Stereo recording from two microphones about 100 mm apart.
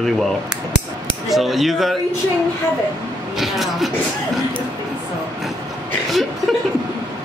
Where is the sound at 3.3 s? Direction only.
Centre (ahead or behind).